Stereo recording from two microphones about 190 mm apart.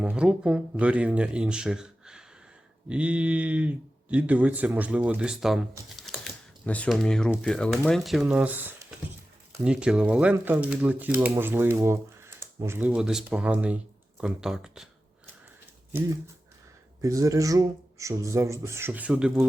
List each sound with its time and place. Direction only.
0.0 s speech: 5° right (ahead or behind)
17.0 s speech: 15° right (ahead or behind)